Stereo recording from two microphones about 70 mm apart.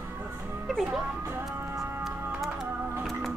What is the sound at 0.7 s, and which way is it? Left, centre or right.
Music, centre.